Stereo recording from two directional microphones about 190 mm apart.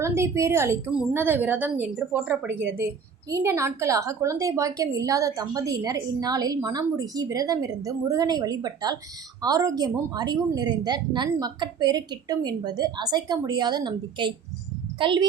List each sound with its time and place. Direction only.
0.0 s a woman's voice: 15° right (ahead or behind)